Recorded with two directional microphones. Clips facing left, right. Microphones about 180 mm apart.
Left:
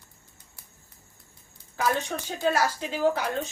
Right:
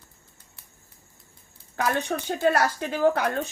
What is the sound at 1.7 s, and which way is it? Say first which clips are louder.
Speech: right 1 dB; 60° right (ahead or behind).